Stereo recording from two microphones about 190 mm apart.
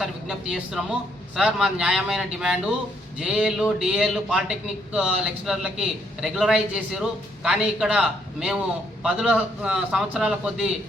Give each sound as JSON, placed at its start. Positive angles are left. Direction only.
{"t": 0.0, "sound": "a man's voice", "side_deg": 0}